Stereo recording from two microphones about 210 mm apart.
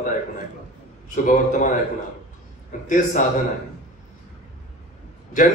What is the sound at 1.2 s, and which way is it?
Speech, 40° left (ahead or behind).